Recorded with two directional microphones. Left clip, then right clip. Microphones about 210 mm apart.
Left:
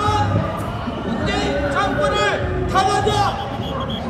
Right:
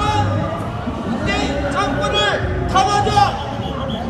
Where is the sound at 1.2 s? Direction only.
20° left (ahead or behind).